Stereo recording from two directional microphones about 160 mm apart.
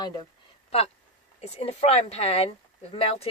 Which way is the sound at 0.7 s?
40° left (ahead or behind).